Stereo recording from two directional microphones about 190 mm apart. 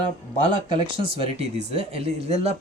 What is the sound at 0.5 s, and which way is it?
Speech, 25° right (ahead or behind).